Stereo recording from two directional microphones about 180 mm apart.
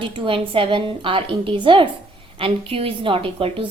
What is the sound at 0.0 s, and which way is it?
A woman's voice, 25° right (ahead or behind).